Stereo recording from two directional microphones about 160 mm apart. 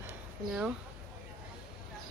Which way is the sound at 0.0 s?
10° right (ahead or behind).